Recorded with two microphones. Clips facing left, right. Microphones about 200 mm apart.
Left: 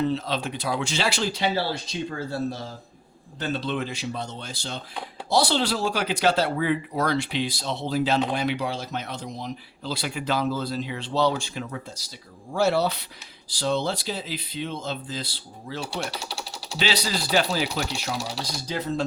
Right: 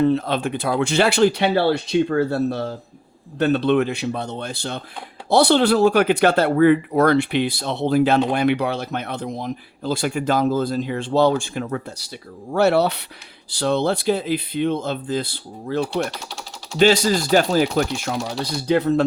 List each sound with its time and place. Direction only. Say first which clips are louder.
0.0 s speech: right 7 dB; 55° right (ahead or behind)